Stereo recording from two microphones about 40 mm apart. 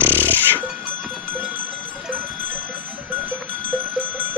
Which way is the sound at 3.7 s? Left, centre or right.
Right.